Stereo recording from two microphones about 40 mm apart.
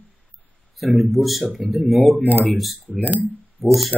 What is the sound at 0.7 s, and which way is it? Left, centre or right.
Speech, centre.